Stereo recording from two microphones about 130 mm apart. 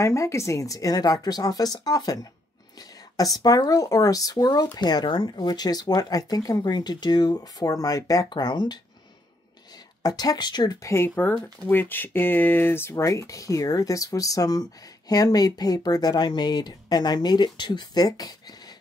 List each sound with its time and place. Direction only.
0.0 s speech: 20° left (ahead or behind)
10.0 s speech: 30° left (ahead or behind)